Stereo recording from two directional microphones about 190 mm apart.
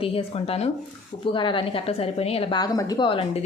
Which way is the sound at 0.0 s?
30° left (ahead or behind).